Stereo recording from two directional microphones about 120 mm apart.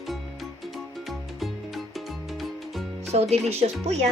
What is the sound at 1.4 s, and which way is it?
Music, centre (ahead or behind).